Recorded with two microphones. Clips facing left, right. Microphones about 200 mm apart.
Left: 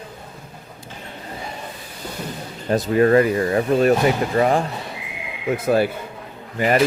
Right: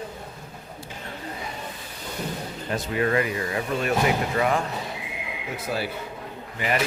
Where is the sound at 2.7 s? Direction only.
40° left (ahead or behind).